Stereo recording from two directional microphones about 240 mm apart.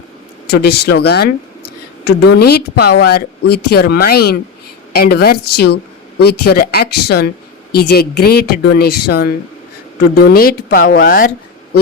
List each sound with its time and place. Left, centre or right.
0.4 s a woman's voice: left